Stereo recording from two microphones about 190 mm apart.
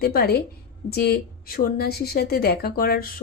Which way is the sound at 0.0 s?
55° left (ahead or behind).